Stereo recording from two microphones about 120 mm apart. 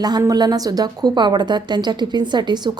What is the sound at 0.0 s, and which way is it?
A woman's voice, 30° right (ahead or behind).